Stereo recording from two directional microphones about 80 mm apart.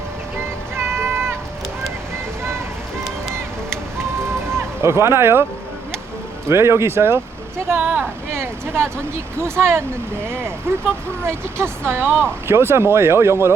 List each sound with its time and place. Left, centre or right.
0.8 s music: right
3.9 s a sound: right
6.5 s speech: right
8.3 s speech: right